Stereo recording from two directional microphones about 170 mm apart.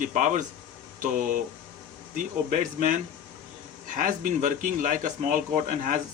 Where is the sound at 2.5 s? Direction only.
50° right (ahead or behind).